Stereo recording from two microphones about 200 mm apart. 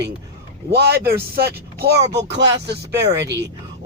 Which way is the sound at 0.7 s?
55° right (ahead or behind).